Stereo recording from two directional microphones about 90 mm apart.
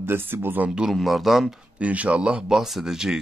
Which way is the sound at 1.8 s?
15° right (ahead or behind).